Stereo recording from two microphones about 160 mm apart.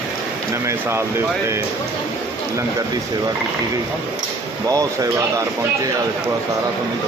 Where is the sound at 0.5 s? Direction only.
15° right (ahead or behind).